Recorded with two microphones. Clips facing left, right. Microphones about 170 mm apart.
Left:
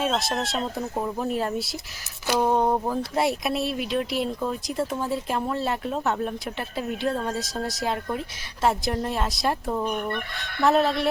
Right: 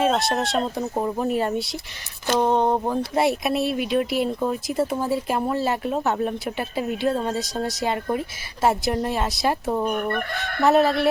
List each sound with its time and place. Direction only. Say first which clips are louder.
0.0 s speech: right 4 dB; centre (ahead or behind)
0.6 s speech: right 3 dB; 20° right (ahead or behind)
1.2 s speech: right 3 dB; centre (ahead or behind)
2.2 s a sound: right 2 dB; 10° left (ahead or behind)
2.8 s speech: right 3 dB; centre (ahead or behind)
9.8 s chicken: right 3 dB; 50° right (ahead or behind)
10.3 s fowl: right 7 dB; 70° right (ahead or behind)
10.6 s speech: right 3 dB; centre (ahead or behind)